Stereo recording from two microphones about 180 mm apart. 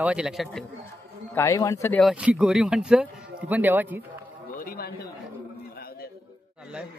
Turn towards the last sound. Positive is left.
turn(degrees=60)  # may be behind; listen again after turning